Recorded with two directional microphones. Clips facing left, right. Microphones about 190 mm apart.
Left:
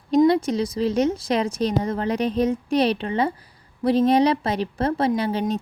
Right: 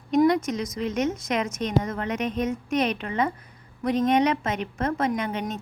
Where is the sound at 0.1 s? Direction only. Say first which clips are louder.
Left 3 dB; 30° left (ahead or behind).